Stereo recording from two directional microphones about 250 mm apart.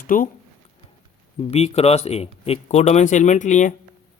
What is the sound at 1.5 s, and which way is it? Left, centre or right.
Speech, left.